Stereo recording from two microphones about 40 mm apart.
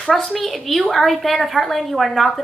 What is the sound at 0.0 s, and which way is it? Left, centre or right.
A woman's voice, centre.